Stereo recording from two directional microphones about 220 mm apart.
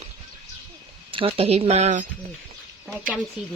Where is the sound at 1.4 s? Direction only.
30° right (ahead or behind).